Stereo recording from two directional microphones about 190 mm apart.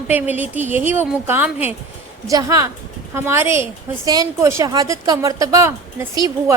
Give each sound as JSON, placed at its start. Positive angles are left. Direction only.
{"t": 0.1, "sound": "a woman's voice", "side_deg": -10}